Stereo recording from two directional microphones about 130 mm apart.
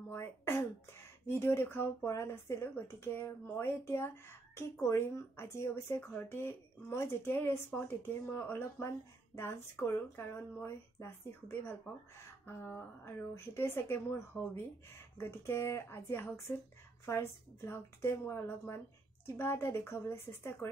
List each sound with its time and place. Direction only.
0.1 s a woman's voice: 20° left (ahead or behind)